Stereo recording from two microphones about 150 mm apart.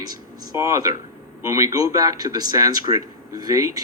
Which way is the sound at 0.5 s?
20° right (ahead or behind).